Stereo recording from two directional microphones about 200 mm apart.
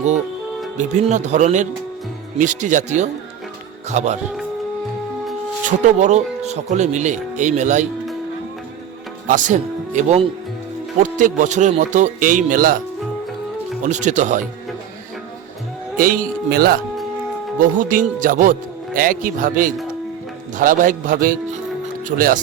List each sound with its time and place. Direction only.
0.8 s speech: 35° right (ahead or behind)
5.6 s speech: 35° right (ahead or behind)
9.2 s speech: 40° right (ahead or behind)
13.8 s speech: 35° right (ahead or behind)
16.0 s speech: 45° right (ahead or behind)